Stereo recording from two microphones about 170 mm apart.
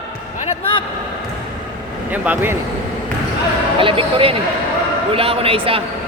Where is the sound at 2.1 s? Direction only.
10° right (ahead or behind).